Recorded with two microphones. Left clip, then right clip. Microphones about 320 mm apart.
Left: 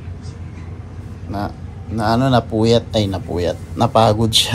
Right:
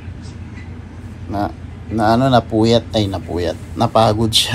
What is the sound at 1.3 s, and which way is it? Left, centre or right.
A man's voice, centre.